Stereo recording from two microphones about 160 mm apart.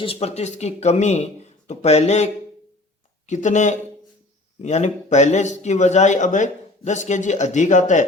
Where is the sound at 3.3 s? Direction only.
50° left (ahead or behind).